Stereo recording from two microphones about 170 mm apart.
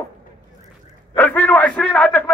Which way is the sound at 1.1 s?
10° left (ahead or behind).